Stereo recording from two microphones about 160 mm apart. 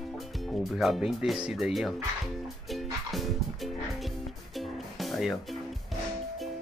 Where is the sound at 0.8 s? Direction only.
Centre (ahead or behind).